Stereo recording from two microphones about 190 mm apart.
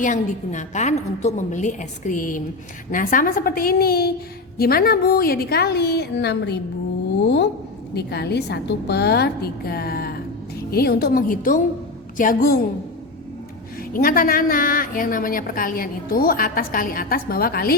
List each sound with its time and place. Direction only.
0.0 s a woman's voice: 40° left (ahead or behind); by 6.6 s 60° left (ahead or behind)
7.9 s a woman's voice: 60° left (ahead or behind)
13.9 s a woman's voice: 45° left (ahead or behind)